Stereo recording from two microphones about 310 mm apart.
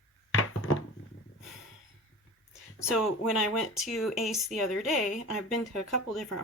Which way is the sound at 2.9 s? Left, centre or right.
Centre.